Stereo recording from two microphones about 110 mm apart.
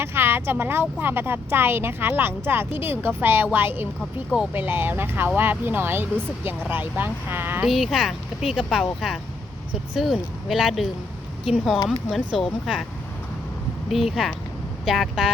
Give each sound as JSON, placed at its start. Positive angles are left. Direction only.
{"t": 0.0, "sound": "a woman's voice", "side_deg": -20}
{"t": 7.7, "sound": "speech", "side_deg": 0}
{"t": 13.9, "sound": "speech", "side_deg": 0}